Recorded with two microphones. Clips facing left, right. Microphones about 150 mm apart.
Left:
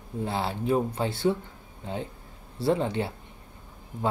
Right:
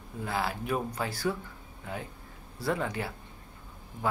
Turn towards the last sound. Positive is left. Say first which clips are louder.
# left 6 dB
turn(degrees=25)  # may be behind; listen again after turning